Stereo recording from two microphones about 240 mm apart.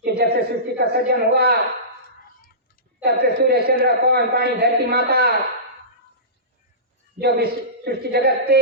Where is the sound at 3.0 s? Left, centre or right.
Right.